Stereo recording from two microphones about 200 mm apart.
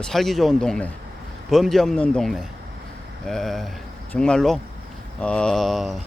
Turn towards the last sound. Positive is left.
turn(degrees=0)  # may be behind; listen again after turning